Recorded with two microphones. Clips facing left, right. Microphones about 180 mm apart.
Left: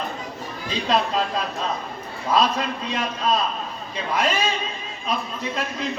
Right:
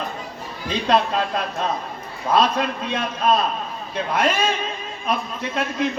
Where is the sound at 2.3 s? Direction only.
55° right (ahead or behind).